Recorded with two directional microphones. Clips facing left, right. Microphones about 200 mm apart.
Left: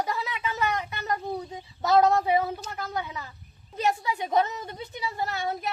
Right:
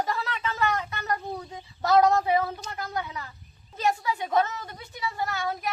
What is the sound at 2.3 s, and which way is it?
Speech, 20° left (ahead or behind).